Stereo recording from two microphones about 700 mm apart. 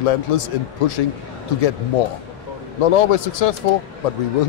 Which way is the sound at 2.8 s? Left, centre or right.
Left.